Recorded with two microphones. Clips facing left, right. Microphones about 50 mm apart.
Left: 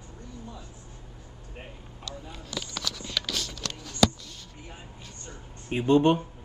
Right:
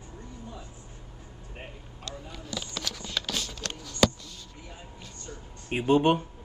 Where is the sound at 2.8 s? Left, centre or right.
Right.